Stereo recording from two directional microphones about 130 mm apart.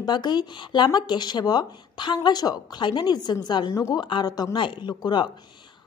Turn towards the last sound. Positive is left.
turn(degrees=35)  # may be behind; listen again after turning